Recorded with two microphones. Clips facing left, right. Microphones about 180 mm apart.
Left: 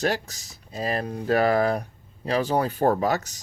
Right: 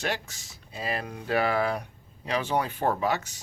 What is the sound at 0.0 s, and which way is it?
Speech, 40° left (ahead or behind).